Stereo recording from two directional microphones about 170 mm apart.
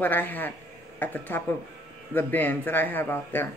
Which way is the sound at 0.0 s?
10° left (ahead or behind).